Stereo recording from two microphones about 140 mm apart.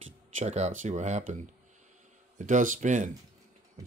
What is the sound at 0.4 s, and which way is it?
Speech, 55° right (ahead or behind).